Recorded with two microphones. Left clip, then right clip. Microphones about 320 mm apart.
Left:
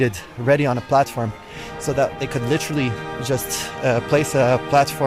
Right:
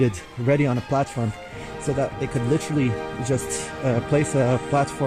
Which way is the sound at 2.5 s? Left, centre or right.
Left.